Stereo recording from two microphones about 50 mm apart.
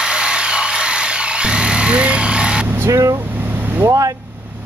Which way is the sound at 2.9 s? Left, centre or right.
Right.